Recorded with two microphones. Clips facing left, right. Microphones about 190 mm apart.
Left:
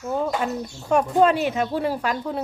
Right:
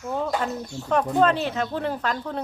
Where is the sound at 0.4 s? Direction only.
10° left (ahead or behind).